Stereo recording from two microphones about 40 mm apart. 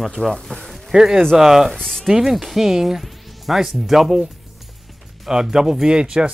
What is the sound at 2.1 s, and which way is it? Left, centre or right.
Speech, centre.